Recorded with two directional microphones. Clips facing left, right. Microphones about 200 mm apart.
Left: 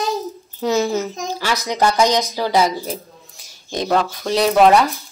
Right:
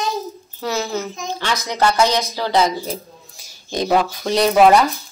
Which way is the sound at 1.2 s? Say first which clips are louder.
Left 1 dB; 5° left (ahead or behind).